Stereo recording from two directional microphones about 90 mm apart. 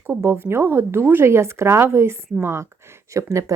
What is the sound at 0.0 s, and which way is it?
A woman's voice, 30° right (ahead or behind).